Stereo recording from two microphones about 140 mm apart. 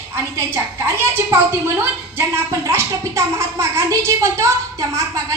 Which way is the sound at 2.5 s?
20° right (ahead or behind).